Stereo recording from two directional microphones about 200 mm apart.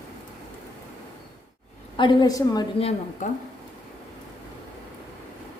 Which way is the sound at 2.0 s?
20° left (ahead or behind).